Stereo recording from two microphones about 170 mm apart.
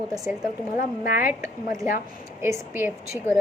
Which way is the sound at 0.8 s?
55° left (ahead or behind).